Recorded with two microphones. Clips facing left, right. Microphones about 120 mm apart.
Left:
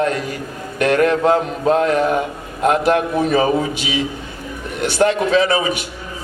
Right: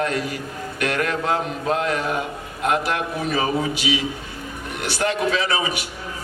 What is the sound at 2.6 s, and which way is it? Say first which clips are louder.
Speech: left 7 dB; 35° left (ahead or behind).